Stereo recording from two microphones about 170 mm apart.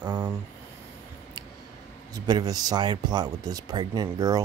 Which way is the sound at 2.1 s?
25° right (ahead or behind).